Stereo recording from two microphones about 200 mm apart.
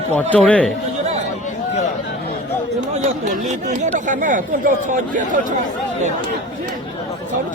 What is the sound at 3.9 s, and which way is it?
Speech, 40° right (ahead or behind).